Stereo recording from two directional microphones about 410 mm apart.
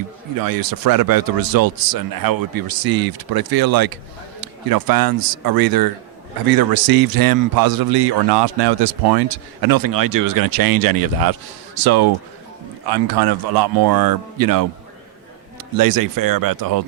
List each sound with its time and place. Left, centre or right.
0.4 s a man's voice: right
15.8 s speech: right